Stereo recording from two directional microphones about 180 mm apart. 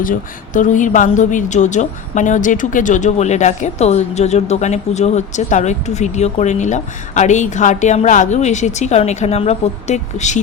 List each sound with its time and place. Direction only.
0.0 s a woman's voice: 45° left (ahead or behind)